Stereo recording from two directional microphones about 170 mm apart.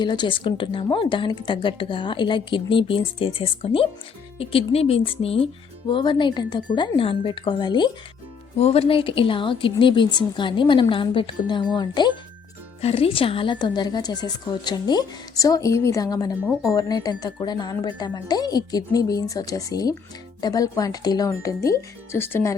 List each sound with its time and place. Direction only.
0.0 s a woman's voice: 25° left (ahead or behind)
8.5 s a woman's voice: 35° left (ahead or behind); by 22.5 s 15° left (ahead or behind)